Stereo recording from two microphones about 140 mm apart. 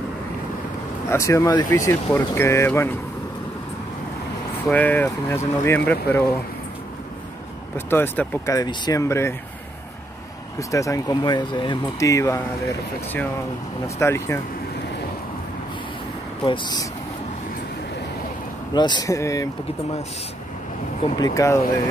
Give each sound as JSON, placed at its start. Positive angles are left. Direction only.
{"t": 1.0, "sound": "speech", "side_deg": 20}
{"t": 4.6, "sound": "speech", "side_deg": 10}
{"t": 7.7, "sound": "speech", "side_deg": 15}
{"t": 8.5, "sound": "speech", "side_deg": 30}
{"t": 10.6, "sound": "speech", "side_deg": 25}
{"t": 13.8, "sound": "speech", "side_deg": 20}
{"t": 16.4, "sound": "speech", "side_deg": 35}
{"t": 18.7, "sound": "speech", "side_deg": 30}
{"t": 21.2, "sound": "speech", "side_deg": 20}